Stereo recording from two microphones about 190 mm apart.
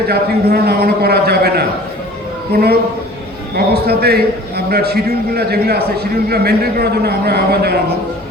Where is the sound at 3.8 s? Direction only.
55° right (ahead or behind).